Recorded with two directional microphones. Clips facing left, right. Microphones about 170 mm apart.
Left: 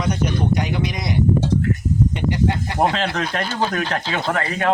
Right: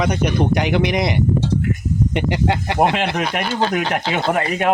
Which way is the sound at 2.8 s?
15° right (ahead or behind).